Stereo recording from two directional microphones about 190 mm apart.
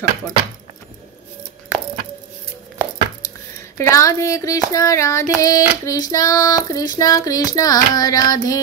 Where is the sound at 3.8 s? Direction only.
15° left (ahead or behind).